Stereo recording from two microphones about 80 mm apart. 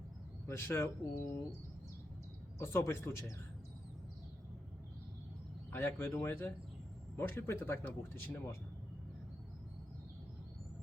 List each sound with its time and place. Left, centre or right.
0.4 s speech: left
2.6 s speech: left
5.7 s speech: left